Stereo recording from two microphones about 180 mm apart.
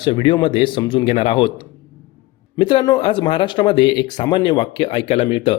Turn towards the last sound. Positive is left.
turn(degrees=30)  # may be behind; listen again after turning